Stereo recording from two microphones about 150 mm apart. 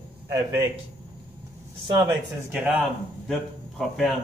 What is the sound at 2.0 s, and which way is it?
A man's voice, 5° right (ahead or behind).